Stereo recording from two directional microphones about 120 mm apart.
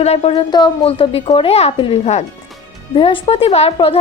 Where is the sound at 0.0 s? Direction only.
60° left (ahead or behind).